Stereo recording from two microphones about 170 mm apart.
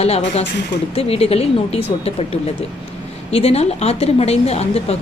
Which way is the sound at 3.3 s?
35° left (ahead or behind).